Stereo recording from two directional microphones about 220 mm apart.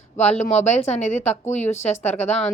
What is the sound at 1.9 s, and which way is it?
Speech, 10° left (ahead or behind).